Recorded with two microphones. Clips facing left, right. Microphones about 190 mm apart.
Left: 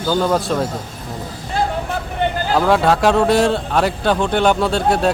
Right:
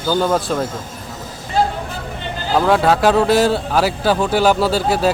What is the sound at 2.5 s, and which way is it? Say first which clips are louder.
Speech: right 1 dB; centre (ahead or behind).